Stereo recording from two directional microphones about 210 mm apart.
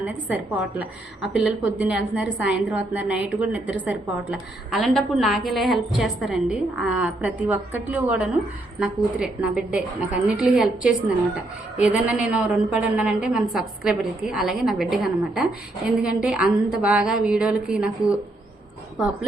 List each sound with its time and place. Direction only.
0.0 s a woman's voice: 5° right (ahead or behind)